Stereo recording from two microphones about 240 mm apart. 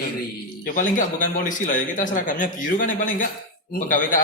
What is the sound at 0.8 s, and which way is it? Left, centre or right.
A man's voice, left.